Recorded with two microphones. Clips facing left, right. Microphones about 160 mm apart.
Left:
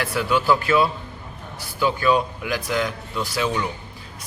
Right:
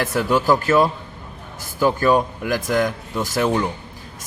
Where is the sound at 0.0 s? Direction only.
45° right (ahead or behind).